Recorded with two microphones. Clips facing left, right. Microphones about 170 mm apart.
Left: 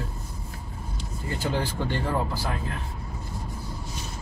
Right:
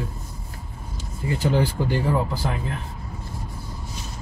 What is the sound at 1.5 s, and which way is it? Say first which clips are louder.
Speech: right 5 dB; 15° right (ahead or behind).